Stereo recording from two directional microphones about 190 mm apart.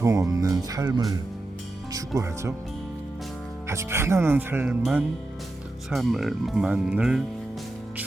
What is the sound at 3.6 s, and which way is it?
Speech, 15° right (ahead or behind).